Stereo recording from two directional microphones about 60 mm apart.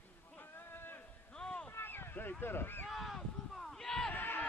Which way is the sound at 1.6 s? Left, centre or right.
Left.